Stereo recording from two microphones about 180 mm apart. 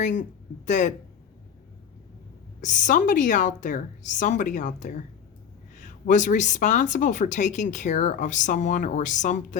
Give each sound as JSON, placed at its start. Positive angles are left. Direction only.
{"t": 0.0, "sound": "a woman's voice", "side_deg": 45}
{"t": 2.6, "sound": "a woman's voice", "side_deg": 45}